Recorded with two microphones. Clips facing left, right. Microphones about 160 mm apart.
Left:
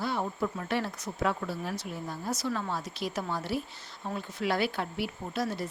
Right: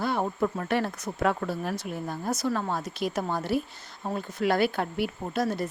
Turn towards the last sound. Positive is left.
turn(degrees=-50)  # may be behind; listen again after turning